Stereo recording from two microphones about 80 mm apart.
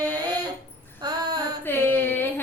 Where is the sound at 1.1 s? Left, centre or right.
Right.